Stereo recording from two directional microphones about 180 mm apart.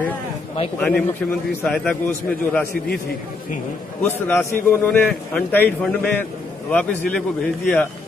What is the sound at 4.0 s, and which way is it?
A man's voice, 10° left (ahead or behind).